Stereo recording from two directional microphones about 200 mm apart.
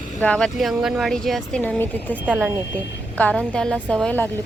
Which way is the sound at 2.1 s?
10° right (ahead or behind).